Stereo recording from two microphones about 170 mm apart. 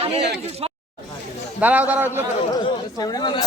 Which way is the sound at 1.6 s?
10° right (ahead or behind).